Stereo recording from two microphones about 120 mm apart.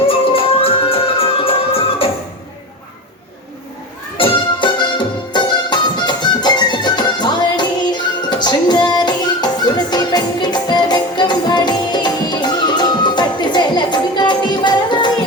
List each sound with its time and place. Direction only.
0.1 s music: 50° left (ahead or behind)
4.2 s music: 40° left (ahead or behind)